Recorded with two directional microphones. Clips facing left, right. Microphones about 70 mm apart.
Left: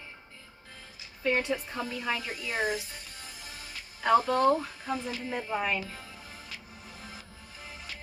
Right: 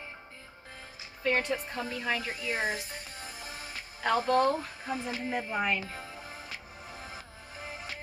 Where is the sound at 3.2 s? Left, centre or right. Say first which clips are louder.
Right 3 dB; right.